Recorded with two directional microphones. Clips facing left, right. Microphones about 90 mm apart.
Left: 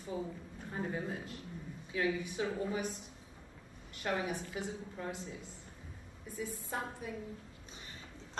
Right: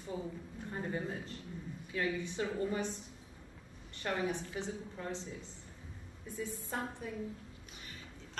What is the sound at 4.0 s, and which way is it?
A woman's voice, 10° left (ahead or behind).